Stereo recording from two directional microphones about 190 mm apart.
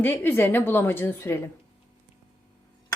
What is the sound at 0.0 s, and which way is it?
A woman's voice, 10° left (ahead or behind).